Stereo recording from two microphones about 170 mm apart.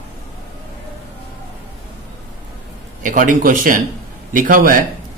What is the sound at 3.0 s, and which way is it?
Speech, 50° right (ahead or behind).